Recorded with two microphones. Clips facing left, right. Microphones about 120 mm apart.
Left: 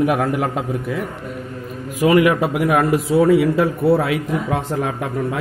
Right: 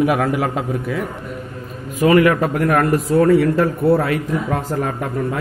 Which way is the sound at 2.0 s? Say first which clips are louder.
Right 1 dB; 10° left (ahead or behind).